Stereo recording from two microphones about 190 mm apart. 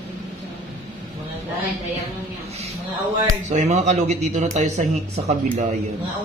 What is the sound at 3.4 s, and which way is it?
Speech, 35° right (ahead or behind).